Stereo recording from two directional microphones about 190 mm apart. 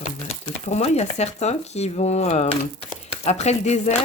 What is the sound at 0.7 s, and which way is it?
Speech, 35° left (ahead or behind).